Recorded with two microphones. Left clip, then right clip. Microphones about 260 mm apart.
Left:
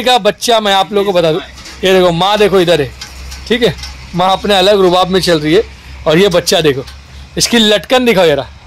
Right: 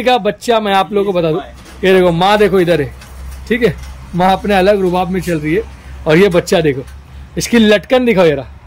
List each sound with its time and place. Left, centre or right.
0.0 s a man's voice: centre
5.0 s speech: left
6.0 s a man's voice: centre